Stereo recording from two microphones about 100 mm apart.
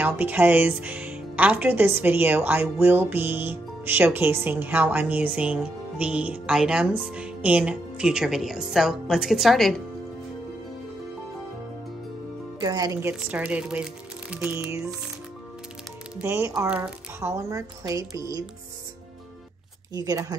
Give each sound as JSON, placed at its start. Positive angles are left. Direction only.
{"t": 0.0, "sound": "a woman's voice", "side_deg": -20}
{"t": 12.5, "sound": "speech", "side_deg": -40}
{"t": 13.0, "sound": "speech", "side_deg": -15}
{"t": 16.3, "sound": "a woman's voice", "side_deg": -30}
{"t": 19.9, "sound": "speech", "side_deg": -40}